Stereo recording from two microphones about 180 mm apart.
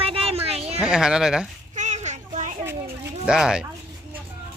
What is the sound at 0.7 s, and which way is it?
Speech, 5° right (ahead or behind).